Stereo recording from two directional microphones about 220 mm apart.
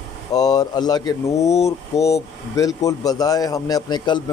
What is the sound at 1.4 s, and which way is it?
Speech, 30° left (ahead or behind).